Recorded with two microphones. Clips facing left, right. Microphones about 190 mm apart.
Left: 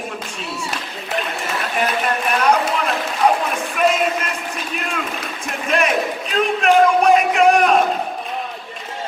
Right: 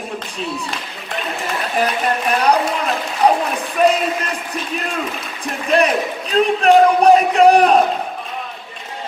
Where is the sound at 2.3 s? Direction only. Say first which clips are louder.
Right 1 dB; 35° right (ahead or behind).